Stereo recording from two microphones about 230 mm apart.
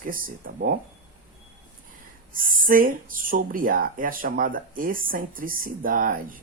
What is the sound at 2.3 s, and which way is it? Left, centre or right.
Speech, right.